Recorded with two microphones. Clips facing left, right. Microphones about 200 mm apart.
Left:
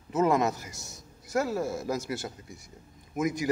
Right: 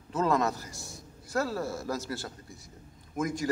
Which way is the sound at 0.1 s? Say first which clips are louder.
Left 3 dB; 15° left (ahead or behind).